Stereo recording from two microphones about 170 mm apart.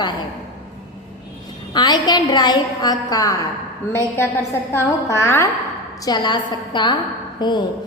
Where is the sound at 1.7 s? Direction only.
25° left (ahead or behind).